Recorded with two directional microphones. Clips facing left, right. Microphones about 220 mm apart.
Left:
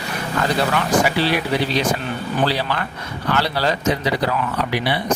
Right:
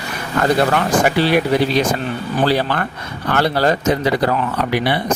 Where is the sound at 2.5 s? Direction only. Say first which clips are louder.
Right 5 dB; 50° right (ahead or behind).